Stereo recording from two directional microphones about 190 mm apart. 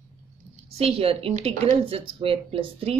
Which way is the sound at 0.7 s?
30° right (ahead or behind).